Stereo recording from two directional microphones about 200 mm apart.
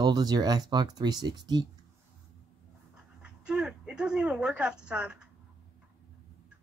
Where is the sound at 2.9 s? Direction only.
5° right (ahead or behind).